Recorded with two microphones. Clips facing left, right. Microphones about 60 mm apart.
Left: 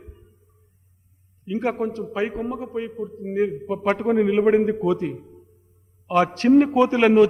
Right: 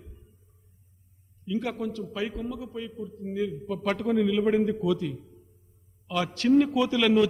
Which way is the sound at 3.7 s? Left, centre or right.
Left.